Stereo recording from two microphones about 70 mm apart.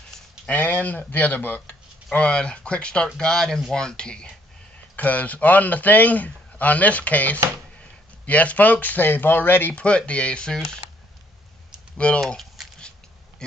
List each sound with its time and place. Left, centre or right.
0.5 s speech: left
2.0 s speech: centre
12.2 s a sound: centre